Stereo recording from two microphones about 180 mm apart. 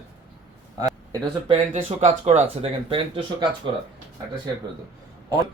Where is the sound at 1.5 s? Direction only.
35° right (ahead or behind).